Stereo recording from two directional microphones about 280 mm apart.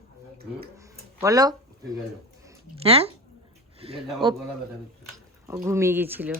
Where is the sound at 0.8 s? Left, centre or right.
Centre.